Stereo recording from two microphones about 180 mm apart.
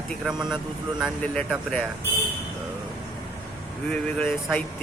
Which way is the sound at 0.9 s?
5° left (ahead or behind).